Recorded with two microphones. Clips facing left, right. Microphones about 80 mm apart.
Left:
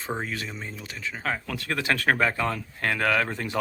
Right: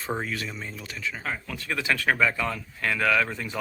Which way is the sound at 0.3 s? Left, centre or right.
Left.